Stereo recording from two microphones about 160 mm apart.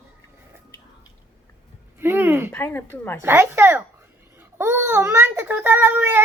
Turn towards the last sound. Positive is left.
turn(degrees=-15)  # may be behind; listen again after turning